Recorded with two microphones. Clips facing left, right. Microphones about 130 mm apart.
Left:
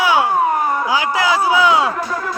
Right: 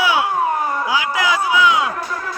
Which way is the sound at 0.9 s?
35° left (ahead or behind).